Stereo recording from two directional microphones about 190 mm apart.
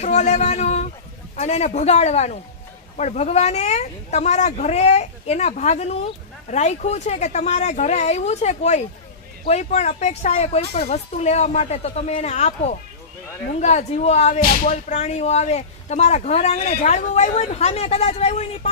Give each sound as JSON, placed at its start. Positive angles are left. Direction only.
{"t": 0.0, "sound": "a woman's voice", "side_deg": 35}